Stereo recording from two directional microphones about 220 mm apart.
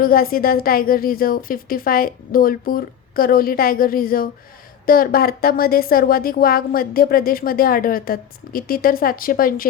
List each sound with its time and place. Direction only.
0.0 s speech: 40° left (ahead or behind)